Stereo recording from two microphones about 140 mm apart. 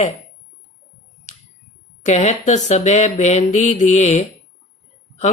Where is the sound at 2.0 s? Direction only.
55° left (ahead or behind).